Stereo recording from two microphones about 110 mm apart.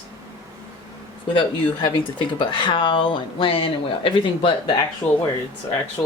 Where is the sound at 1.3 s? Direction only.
50° left (ahead or behind).